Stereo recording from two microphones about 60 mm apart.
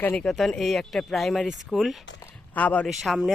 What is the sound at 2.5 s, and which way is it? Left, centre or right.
Speech, left.